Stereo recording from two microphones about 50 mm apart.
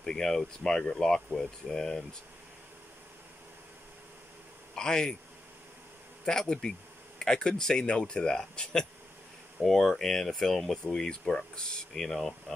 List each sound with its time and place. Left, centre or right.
0.0 s speech: centre
4.7 s speech: centre
6.2 s speech: centre
9.6 s speech: centre